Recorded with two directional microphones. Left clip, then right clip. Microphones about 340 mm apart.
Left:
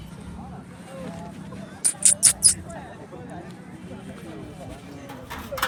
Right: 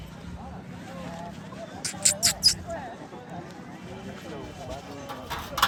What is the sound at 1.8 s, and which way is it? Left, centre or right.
Rodents, centre.